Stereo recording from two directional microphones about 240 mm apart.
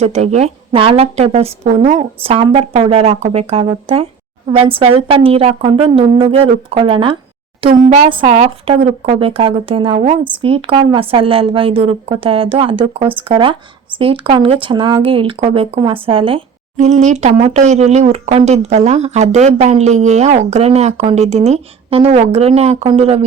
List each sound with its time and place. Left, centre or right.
0.0 s speech: right